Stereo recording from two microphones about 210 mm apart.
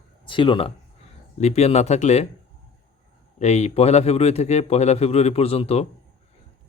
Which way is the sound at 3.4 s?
30° left (ahead or behind).